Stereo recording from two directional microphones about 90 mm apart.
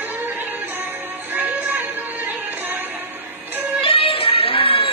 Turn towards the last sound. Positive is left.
turn(degrees=90)